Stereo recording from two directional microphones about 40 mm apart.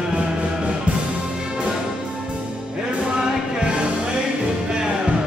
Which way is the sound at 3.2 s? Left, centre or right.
Right.